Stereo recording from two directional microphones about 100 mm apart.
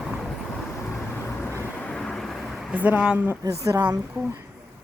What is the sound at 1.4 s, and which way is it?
Vehicle, 20° left (ahead or behind).